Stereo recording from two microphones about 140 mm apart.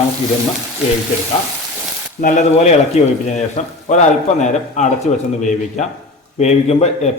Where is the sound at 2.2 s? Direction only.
55° left (ahead or behind).